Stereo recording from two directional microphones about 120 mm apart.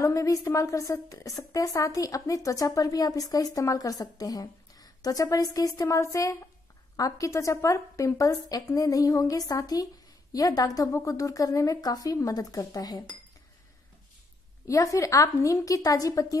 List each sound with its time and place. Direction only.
0.0 s a woman's voice: 25° left (ahead or behind)
14.7 s a woman's voice: 25° left (ahead or behind)